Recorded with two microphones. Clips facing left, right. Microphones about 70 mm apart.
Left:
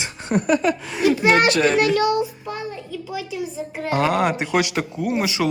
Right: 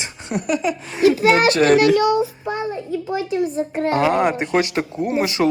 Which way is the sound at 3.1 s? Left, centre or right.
Right.